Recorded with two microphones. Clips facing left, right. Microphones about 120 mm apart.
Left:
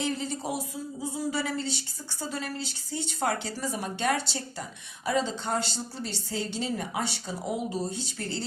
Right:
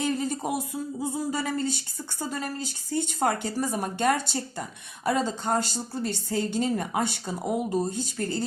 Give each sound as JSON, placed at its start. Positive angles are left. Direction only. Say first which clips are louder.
{"t": 0.0, "sound": "a woman's voice", "louder": "right 3 dB", "side_deg": -50}